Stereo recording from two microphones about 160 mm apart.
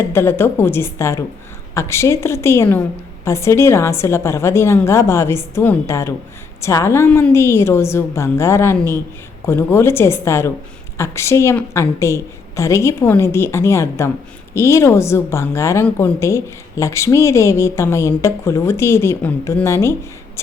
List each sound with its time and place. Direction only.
0.0 s a woman's voice: 15° left (ahead or behind)